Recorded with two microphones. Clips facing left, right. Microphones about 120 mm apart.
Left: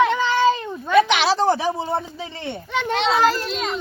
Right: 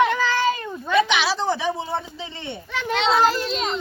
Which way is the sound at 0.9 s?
45° left (ahead or behind).